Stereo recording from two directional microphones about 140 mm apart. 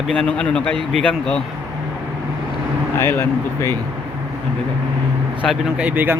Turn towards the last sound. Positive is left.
turn(degrees=-10)  # may be behind; listen again after turning